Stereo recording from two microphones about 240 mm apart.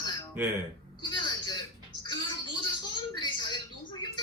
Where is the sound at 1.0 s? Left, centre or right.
Centre.